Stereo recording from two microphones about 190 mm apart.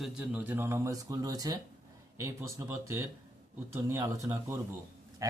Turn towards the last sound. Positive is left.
turn(degrees=-15)  # may be behind; listen again after turning